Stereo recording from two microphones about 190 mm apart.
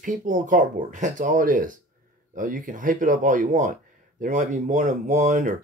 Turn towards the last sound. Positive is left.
turn(degrees=-40)  # may be behind; listen again after turning